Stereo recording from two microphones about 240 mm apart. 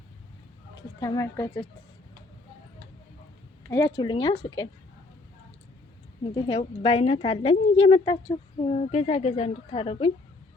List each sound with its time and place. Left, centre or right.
0.9 s a woman's voice: centre
3.7 s speech: centre
6.3 s speech: left